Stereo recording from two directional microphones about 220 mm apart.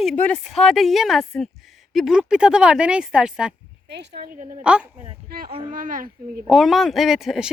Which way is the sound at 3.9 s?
50° right (ahead or behind).